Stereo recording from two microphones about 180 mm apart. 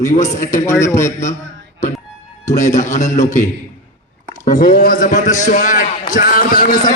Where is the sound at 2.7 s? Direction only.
45° left (ahead or behind).